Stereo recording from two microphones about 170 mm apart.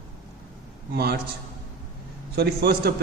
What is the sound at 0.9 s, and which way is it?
Speech, 70° right (ahead or behind).